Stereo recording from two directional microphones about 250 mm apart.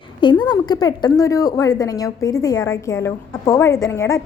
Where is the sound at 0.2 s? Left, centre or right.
Centre.